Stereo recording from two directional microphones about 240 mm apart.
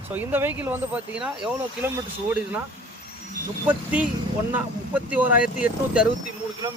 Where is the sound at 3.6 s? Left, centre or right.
Centre.